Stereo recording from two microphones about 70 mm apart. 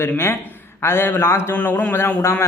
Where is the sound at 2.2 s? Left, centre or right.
Left.